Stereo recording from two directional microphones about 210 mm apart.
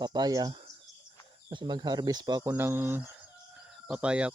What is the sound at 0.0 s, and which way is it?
Speech, 20° right (ahead or behind).